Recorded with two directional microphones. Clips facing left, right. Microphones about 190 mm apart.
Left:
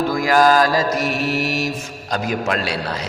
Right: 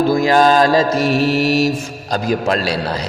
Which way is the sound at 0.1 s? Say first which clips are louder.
Even; 25° right (ahead or behind).